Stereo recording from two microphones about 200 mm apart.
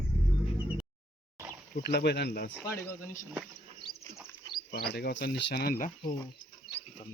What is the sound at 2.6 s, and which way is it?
Speech, 15° left (ahead or behind).